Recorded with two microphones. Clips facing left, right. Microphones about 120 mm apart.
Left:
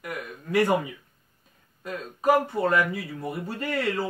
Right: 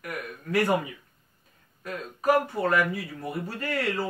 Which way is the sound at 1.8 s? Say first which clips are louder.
Left 3 dB; 25° left (ahead or behind).